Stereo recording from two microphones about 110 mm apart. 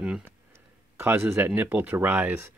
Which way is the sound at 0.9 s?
15° right (ahead or behind).